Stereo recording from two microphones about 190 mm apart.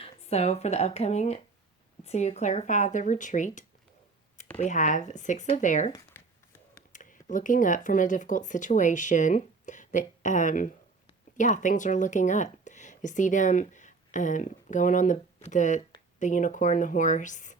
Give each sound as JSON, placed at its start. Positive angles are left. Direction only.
{"t": 0.0, "sound": "speech", "side_deg": 35}
{"t": 5.9, "sound": "a sound", "side_deg": 15}
{"t": 6.9, "sound": "speech", "side_deg": 40}